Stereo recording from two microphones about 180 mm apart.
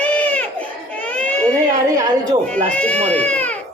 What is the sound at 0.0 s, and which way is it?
Baby cry, 5° left (ahead or behind).